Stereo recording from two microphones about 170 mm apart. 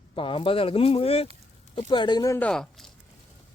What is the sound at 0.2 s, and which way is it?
Speech, 30° left (ahead or behind).